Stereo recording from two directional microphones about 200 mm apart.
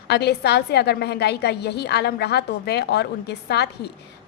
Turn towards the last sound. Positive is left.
turn(degrees=55)  # may be behind; listen again after turning